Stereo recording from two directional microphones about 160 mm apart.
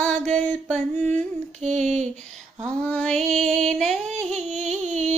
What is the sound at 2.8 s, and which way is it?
Music, 5° left (ahead or behind).